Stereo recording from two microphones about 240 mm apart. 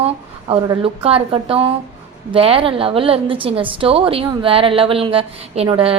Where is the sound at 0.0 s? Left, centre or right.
Right.